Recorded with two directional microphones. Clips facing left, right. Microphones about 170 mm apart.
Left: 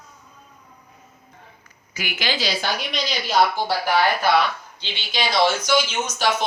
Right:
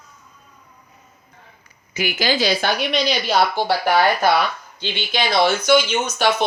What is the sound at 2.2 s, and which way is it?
Speech, 45° right (ahead or behind).